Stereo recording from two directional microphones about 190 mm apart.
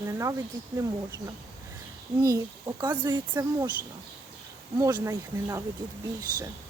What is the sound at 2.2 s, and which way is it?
Speech, 20° right (ahead or behind).